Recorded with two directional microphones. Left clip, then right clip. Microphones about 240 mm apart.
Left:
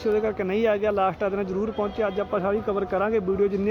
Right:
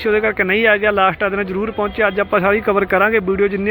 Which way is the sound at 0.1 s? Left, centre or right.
Centre.